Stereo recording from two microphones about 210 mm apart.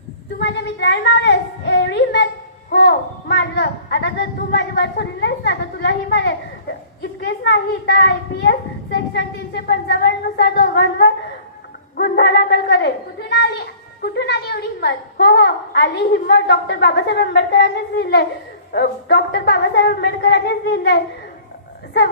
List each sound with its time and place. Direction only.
0.3 s a woman's voice: 55° left (ahead or behind)
14.0 s a woman's voice: 55° left (ahead or behind)